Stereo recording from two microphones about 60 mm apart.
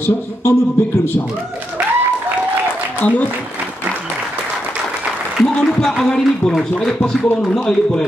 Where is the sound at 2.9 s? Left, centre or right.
Left.